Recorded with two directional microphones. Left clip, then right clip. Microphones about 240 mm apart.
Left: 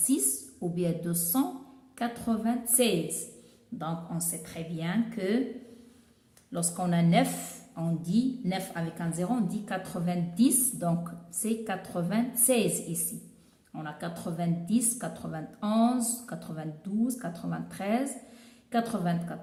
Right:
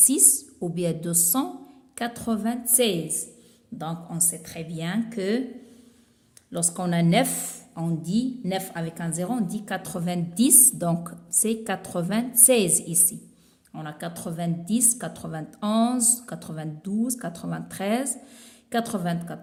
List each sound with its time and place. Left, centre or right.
0.1 s a woman's voice: right
6.5 s a woman's voice: right